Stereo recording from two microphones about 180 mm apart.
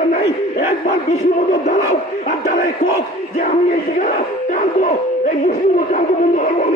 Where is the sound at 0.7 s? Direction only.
40° left (ahead or behind).